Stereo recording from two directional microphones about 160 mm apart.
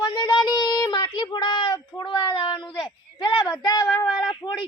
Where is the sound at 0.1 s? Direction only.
30° left (ahead or behind).